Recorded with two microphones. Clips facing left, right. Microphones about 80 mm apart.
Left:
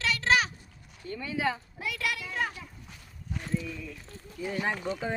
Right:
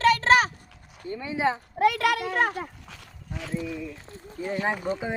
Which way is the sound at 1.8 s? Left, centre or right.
Right.